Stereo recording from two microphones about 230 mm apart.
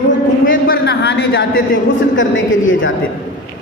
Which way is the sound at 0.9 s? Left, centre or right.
Left.